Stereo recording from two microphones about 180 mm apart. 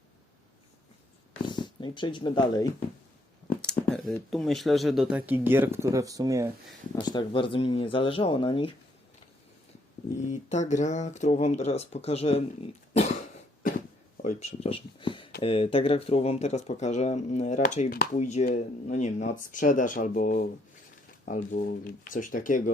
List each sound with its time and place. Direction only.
1.4 s speech: 25° left (ahead or behind)
3.6 s speech: 5° left (ahead or behind); by 6.5 s 20° right (ahead or behind)
6.9 s speech: 25° left (ahead or behind)
10.5 s speech: 40° left (ahead or behind)
12.9 s cough: 35° left (ahead or behind)
14.2 s speech: 40° left (ahead or behind)